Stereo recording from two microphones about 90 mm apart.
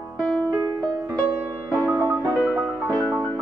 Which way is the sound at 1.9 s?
30° right (ahead or behind).